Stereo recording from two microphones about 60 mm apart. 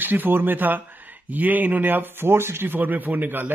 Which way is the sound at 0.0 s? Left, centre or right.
Right.